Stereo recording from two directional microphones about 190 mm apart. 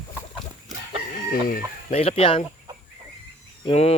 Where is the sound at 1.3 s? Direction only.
50° left (ahead or behind).